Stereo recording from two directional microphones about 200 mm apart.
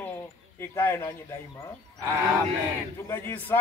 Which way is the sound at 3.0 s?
10° left (ahead or behind).